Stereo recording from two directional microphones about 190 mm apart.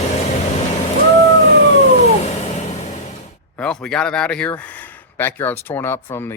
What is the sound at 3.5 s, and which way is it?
Speech, 5° left (ahead or behind).